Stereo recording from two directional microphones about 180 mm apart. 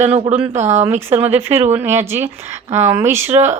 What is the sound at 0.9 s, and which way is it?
A woman's voice, 15° right (ahead or behind).